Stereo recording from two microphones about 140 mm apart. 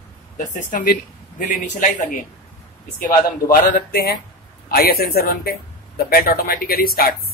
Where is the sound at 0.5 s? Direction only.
65° left (ahead or behind).